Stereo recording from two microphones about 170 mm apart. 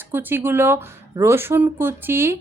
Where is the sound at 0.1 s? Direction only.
10° right (ahead or behind).